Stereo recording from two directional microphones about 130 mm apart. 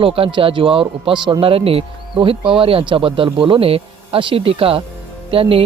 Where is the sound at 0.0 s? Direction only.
45° right (ahead or behind).